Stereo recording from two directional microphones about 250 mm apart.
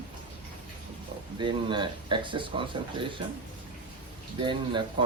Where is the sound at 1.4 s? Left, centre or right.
Centre.